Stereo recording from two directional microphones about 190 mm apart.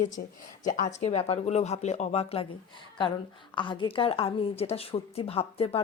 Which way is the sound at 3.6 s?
25° left (ahead or behind).